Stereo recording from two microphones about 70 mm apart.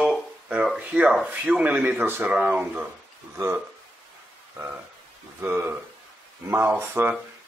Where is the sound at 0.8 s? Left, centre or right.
Right.